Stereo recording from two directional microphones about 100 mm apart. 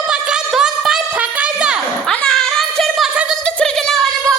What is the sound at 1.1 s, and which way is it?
Music, 10° right (ahead or behind).